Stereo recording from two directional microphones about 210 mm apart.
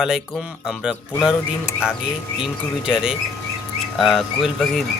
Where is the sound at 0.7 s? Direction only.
5° right (ahead or behind).